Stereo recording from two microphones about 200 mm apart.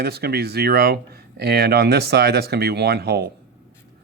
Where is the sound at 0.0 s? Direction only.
50° right (ahead or behind).